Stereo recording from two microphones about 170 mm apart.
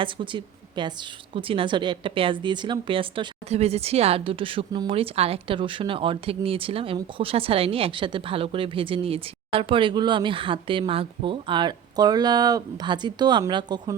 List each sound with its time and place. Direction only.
0.0 s a woman's voice: 30° right (ahead or behind)